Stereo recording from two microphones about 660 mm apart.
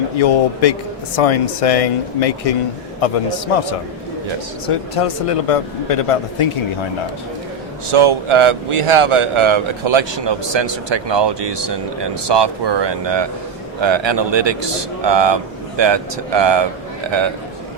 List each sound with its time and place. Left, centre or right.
0.2 s a man's voice: left
7.9 s a man's voice: right